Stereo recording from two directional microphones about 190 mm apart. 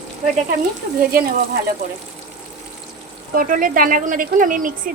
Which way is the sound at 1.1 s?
50° right (ahead or behind).